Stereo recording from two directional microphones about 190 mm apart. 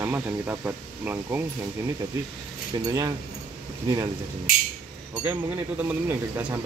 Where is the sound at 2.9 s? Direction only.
20° right (ahead or behind).